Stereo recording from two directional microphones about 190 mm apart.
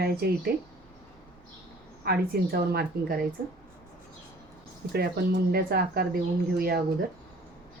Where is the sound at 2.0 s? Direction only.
55° right (ahead or behind).